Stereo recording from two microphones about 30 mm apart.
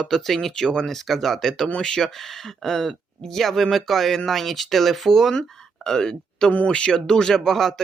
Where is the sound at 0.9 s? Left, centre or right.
Centre.